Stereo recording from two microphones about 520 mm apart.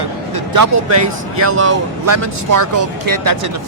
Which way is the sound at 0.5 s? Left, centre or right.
Right.